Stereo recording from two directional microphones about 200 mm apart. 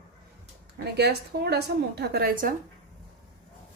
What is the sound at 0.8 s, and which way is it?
A woman's voice, 55° right (ahead or behind).